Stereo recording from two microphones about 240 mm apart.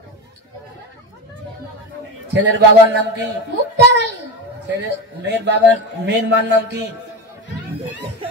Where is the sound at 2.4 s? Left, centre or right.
Right.